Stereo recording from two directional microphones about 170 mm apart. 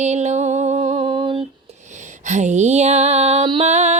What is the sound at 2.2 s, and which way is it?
Music, 45° right (ahead or behind).